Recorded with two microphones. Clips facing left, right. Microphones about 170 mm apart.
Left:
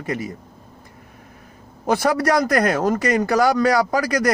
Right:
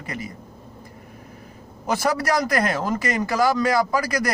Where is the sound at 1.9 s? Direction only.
50° left (ahead or behind).